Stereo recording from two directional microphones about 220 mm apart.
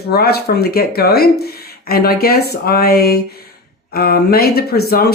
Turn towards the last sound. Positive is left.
turn(degrees=45)  # may be behind; listen again after turning